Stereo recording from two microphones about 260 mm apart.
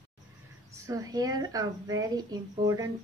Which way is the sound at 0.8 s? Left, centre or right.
Centre.